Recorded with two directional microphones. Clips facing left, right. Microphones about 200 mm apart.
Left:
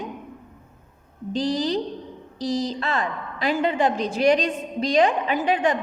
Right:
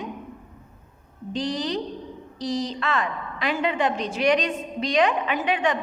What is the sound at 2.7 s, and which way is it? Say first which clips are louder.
A woman's voice: left 1 dB; 35° left (ahead or behind).